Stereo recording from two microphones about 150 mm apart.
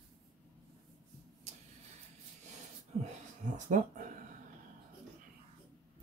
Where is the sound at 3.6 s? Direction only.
55° right (ahead or behind).